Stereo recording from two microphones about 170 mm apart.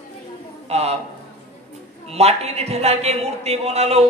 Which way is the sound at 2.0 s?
40° right (ahead or behind).